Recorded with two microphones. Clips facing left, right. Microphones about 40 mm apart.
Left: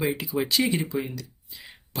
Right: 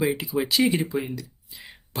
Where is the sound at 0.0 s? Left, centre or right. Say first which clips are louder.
Right 2 dB; centre.